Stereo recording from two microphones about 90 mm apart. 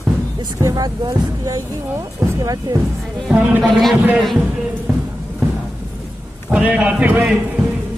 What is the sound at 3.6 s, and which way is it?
Speech, 5° left (ahead or behind).